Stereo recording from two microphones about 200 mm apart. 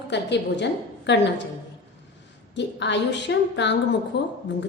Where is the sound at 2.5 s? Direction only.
60° left (ahead or behind).